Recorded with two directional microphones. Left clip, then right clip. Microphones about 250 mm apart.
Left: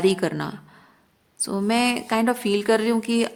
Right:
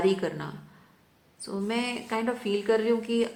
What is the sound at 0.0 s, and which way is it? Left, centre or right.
Speech, left.